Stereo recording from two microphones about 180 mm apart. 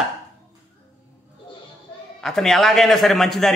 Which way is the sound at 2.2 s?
Centre (ahead or behind).